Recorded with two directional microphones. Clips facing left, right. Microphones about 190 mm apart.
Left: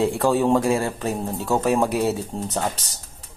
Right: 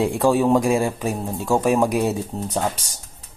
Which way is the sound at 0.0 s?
15° right (ahead or behind).